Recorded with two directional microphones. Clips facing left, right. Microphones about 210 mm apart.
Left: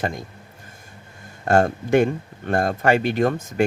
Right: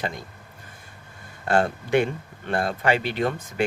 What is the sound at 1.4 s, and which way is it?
Speech, 45° left (ahead or behind).